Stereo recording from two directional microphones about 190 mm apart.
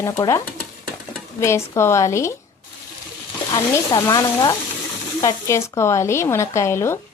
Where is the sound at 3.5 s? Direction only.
15° left (ahead or behind).